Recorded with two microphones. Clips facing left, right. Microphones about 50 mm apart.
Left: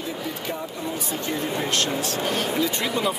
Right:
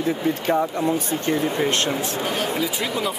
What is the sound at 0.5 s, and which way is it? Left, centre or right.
Speech, right.